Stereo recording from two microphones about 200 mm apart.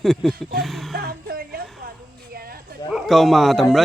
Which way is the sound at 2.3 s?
50° right (ahead or behind).